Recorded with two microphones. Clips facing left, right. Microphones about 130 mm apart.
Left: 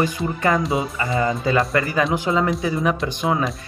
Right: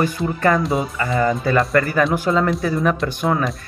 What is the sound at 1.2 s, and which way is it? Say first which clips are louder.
Speech: right 2 dB; 20° left (ahead or behind).